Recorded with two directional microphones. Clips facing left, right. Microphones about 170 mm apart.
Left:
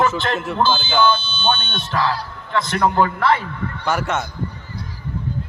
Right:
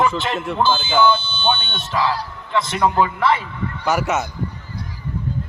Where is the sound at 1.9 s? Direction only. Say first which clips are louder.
Right 1 dB; 5° right (ahead or behind).